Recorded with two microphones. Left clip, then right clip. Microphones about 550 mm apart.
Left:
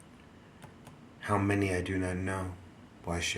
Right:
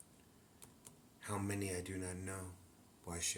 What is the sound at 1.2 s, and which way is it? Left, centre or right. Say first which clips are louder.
A man's voice: left 13 dB; right.